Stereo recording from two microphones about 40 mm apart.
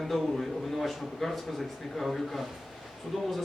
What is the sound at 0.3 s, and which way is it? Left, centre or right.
A man's voice, centre.